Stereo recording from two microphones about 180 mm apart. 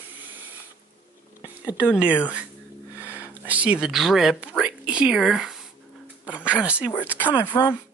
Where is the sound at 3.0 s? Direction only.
10° right (ahead or behind).